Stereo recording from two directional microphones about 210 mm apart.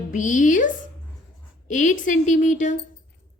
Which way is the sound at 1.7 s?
35° left (ahead or behind).